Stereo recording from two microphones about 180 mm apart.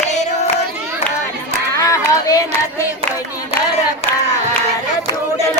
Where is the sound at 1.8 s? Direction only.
20° left (ahead or behind).